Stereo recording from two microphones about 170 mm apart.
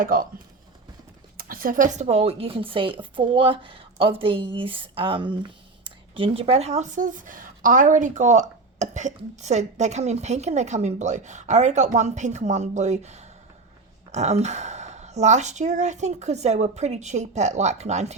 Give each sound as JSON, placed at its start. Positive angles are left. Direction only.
{"t": 0.0, "sound": "speech", "side_deg": -55}
{"t": 1.4, "sound": "speech", "side_deg": -55}